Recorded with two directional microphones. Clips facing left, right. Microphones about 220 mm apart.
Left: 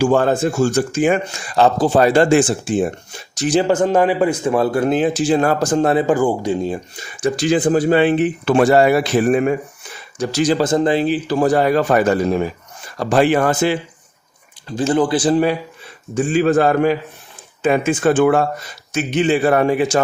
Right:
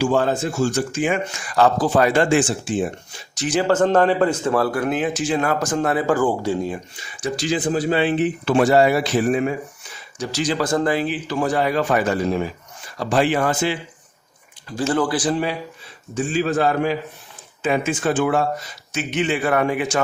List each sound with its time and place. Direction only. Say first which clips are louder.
0.0 s speech: left 4 dB; 50° left (ahead or behind)
3.7 s a man's voice: right 2 dB; 10° left (ahead or behind)
6.7 s speech: left 4 dB; 30° left (ahead or behind)
7.2 s speech: left 6 dB; 55° left (ahead or behind)
10.6 s a man's voice: left 4 dB; 20° left (ahead or behind)
11.0 s speech: left 6 dB; 35° left (ahead or behind)
14.7 s a man's voice: left 4 dB; 20° left (ahead or behind)
16.1 s speech: left 6 dB; 55° left (ahead or behind)
18.9 s speech: left 6 dB; 35° left (ahead or behind)